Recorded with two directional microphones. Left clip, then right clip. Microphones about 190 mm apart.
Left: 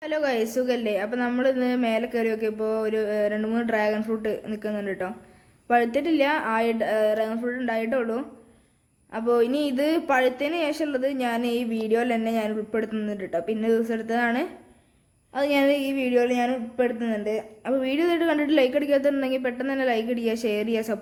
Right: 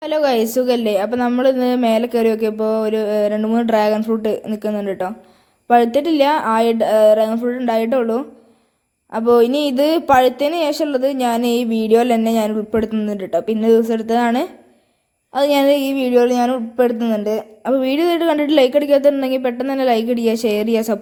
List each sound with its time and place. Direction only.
0.0 s speech: 30° right (ahead or behind)